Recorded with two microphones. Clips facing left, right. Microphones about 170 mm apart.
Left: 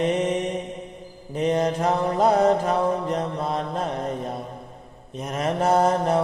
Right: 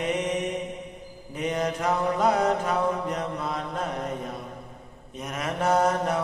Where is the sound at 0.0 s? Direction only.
30° left (ahead or behind).